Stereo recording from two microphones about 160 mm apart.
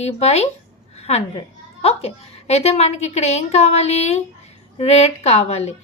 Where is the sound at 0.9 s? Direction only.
40° left (ahead or behind).